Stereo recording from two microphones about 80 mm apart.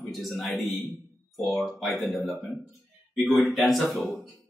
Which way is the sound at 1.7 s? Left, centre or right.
Centre.